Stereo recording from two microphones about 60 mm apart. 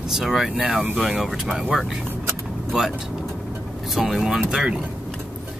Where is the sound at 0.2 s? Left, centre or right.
Centre.